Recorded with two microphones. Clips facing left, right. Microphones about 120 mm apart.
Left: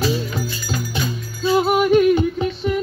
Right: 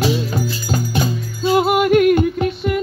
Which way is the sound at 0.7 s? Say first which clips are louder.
Right 5 dB; 35° right (ahead or behind).